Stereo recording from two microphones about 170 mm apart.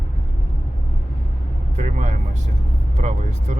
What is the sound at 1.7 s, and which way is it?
Vehicle, 45° right (ahead or behind).